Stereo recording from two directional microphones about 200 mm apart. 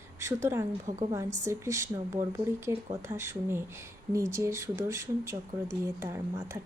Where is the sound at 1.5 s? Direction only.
15° right (ahead or behind).